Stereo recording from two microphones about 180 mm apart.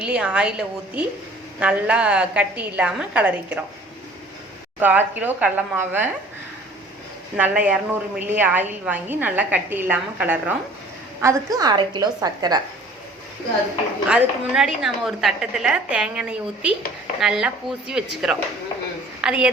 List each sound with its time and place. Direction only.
0.0 s a woman's voice: 5° right (ahead or behind)
4.8 s a woman's voice: 10° right (ahead or behind)
7.3 s a woman's voice: 10° right (ahead or behind)
14.1 s a woman's voice: 5° right (ahead or behind)